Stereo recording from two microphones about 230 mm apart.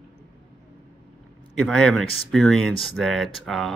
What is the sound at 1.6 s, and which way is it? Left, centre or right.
Speech, centre.